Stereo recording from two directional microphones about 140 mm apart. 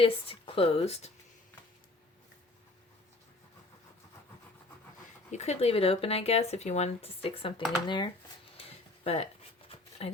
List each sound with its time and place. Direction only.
0.0 s speech: 40° left (ahead or behind)
5.3 s speech: 50° left (ahead or behind); by 8.1 s 35° left (ahead or behind)
9.0 s a sound: 45° left (ahead or behind)